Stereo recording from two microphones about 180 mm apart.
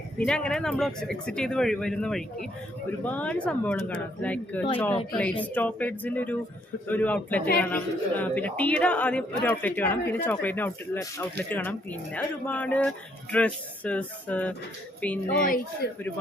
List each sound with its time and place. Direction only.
0.3 s speech: 5° left (ahead or behind)
15.4 s speech: 50° left (ahead or behind)